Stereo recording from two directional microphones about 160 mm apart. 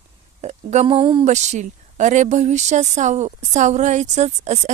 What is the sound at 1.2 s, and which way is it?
Speech, 45° right (ahead or behind).